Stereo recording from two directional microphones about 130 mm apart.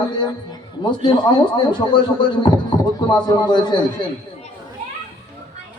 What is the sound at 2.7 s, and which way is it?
Heart sounds, 35° left (ahead or behind).